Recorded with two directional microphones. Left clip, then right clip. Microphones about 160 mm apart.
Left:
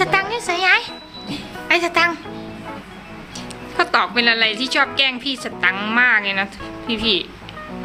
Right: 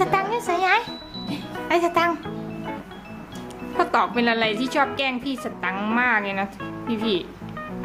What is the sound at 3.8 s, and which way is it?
A woman's voice, 15° right (ahead or behind).